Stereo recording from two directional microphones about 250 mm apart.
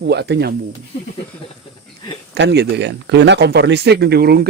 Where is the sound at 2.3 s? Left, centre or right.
Right.